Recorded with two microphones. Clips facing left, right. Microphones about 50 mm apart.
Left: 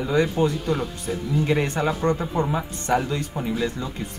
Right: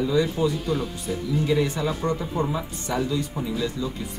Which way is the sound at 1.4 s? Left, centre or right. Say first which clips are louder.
Left 1 dB; left.